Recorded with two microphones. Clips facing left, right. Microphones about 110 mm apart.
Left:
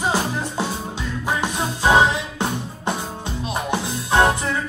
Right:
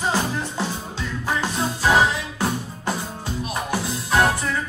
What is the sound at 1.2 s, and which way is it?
Music, 20° left (ahead or behind).